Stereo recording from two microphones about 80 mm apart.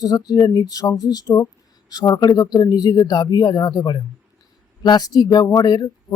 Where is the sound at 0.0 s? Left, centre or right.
Left.